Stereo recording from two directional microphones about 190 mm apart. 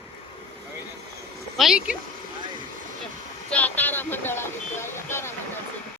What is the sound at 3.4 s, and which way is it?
Speech, 5° left (ahead or behind).